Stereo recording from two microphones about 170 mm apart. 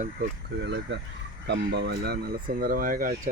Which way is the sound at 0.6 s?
85° right.